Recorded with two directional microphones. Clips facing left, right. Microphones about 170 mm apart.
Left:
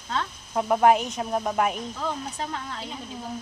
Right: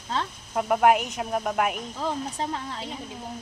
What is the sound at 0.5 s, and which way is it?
Speech, 5° right (ahead or behind).